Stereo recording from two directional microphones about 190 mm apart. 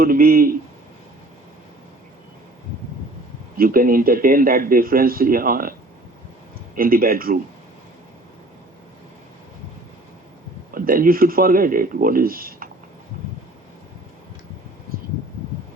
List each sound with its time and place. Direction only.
0.0 s speech: 50° right (ahead or behind)
3.6 s speech: 50° right (ahead or behind)
6.7 s speech: 50° right (ahead or behind)
10.8 s speech: 45° right (ahead or behind)